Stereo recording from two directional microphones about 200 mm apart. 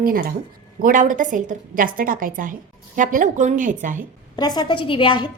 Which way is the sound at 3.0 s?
40° right (ahead or behind).